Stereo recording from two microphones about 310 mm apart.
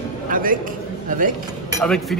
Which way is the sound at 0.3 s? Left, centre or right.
Right.